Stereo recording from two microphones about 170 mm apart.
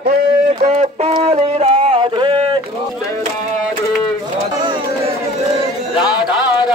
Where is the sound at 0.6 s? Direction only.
40° right (ahead or behind).